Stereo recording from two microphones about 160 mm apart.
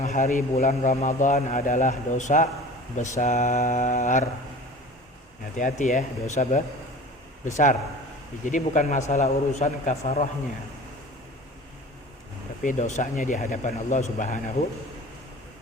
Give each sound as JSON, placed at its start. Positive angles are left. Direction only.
{"t": 0.0, "sound": "a man's voice", "side_deg": 50}
{"t": 5.5, "sound": "a man's voice", "side_deg": 50}
{"t": 12.6, "sound": "a man's voice", "side_deg": 55}